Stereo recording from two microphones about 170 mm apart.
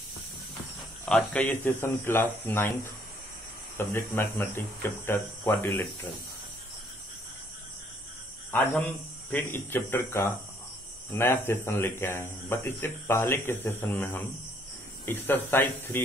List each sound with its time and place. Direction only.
1.0 s speech: 5° left (ahead or behind)
3.7 s speech: 15° left (ahead or behind)
8.5 s speech: 10° left (ahead or behind)